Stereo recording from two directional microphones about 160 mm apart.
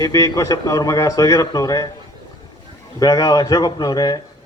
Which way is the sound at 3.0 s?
20° left (ahead or behind).